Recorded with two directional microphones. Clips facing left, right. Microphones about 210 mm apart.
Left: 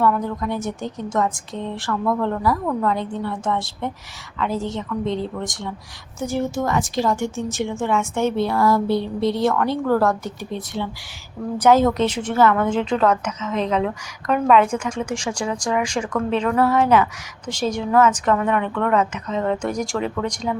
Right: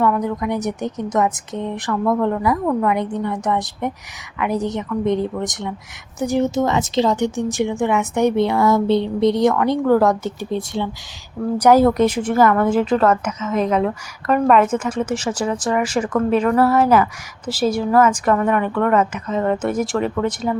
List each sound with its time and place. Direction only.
0.0 s a woman's voice: 15° right (ahead or behind)
11.5 s a woman's voice: 10° right (ahead or behind)